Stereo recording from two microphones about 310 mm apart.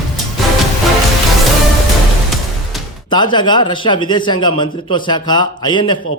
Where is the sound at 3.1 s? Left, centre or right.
Centre.